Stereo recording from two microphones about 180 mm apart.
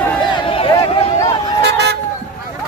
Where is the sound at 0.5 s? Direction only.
30° left (ahead or behind).